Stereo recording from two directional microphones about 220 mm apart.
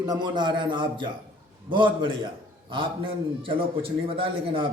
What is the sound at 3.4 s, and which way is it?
A man's voice, 25° right (ahead or behind).